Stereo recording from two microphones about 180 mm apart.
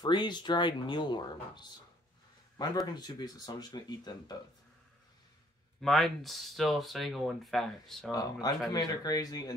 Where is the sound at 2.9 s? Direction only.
25° left (ahead or behind).